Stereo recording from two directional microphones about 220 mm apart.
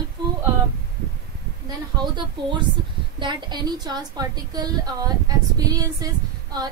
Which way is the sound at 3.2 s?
20° right (ahead or behind).